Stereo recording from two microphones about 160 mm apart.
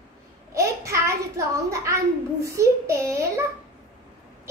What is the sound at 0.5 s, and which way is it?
A child's voice, 20° right (ahead or behind).